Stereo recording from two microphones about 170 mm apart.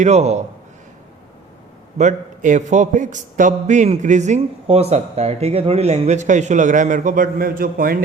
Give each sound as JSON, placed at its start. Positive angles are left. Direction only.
{"t": 0.0, "sound": "a man's voice", "side_deg": -40}
{"t": 2.0, "sound": "a man's voice", "side_deg": -45}